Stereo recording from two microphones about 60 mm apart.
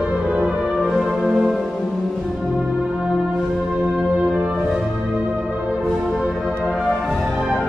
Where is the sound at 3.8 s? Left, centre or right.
Centre.